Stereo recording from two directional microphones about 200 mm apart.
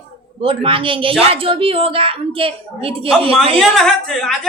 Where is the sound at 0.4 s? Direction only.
25° right (ahead or behind).